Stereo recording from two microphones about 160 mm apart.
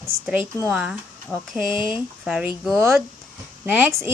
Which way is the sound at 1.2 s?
5° left (ahead or behind).